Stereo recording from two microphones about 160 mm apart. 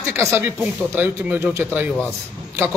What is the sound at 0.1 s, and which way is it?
A man's voice, 15° right (ahead or behind).